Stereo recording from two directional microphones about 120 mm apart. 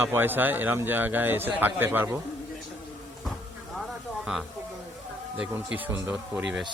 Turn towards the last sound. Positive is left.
turn(degrees=-5)  # may be behind; listen again after turning